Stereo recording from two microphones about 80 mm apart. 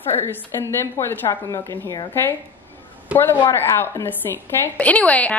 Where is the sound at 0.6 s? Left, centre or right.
Left.